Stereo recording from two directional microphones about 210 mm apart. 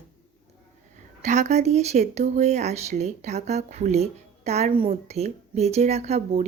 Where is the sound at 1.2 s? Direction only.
35° right (ahead or behind).